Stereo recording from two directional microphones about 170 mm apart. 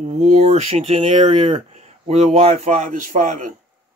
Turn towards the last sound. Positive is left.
turn(degrees=-45)  # may be behind; listen again after turning